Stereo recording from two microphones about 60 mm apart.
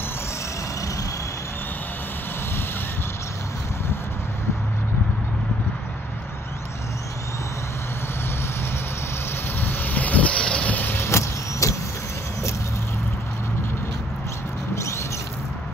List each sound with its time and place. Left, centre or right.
9.6 s vehicle: left
11.0 s vehicle: left